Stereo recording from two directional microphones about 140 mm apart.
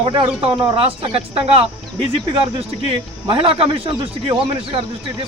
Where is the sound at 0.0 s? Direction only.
40° right (ahead or behind).